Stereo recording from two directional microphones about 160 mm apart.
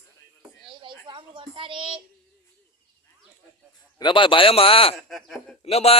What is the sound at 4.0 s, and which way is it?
Speech, 30° left (ahead or behind).